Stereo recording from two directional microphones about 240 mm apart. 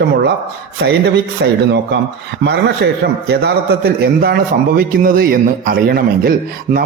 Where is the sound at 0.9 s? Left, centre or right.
Right.